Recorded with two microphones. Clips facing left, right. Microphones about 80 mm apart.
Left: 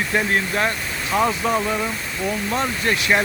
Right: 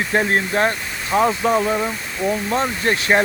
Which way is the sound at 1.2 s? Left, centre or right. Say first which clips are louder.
Right 3 dB; centre.